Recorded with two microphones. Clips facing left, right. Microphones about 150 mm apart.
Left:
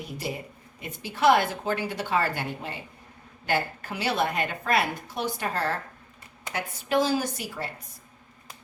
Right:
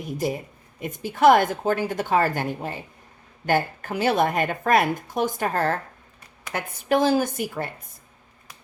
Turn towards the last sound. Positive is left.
turn(degrees=-50)  # may be behind; listen again after turning